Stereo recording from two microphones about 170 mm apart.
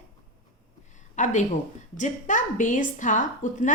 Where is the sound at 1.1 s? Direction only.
45° left (ahead or behind).